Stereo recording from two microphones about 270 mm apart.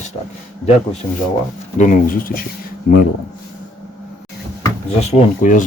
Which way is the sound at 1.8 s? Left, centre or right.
Left.